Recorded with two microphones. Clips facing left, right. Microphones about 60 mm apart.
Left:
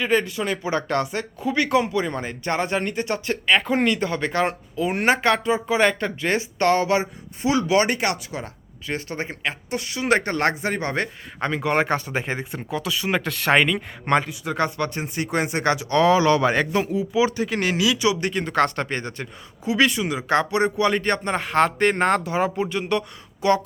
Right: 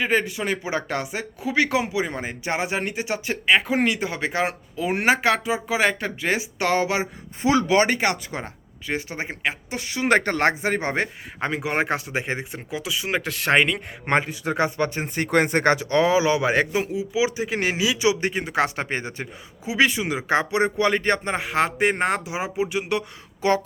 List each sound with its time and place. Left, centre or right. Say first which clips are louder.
0.0 s speech: left 1 dB; right
7.4 s speech: right 1 dB; right
8.9 s speech: even; centre
9.7 s speech: right 1 dB; right
11.3 s speech: left 2 dB; centre
14.5 s speech: right 1 dB; centre
14.9 s speech: right 3 dB; right
16.0 s speech: left 6 dB; centre
16.8 s speech: left 2 dB; centre; by 18.4 s right
18.4 s speech: left 5 dB; centre
21.3 s speech: left 3 dB; centre